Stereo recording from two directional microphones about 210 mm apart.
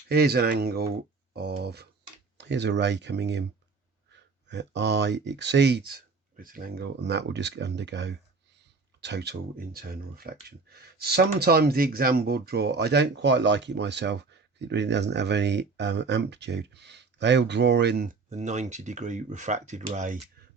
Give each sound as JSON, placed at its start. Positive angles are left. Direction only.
{"t": 0.1, "sound": "speech", "side_deg": -50}
{"t": 18.3, "sound": "speech", "side_deg": -35}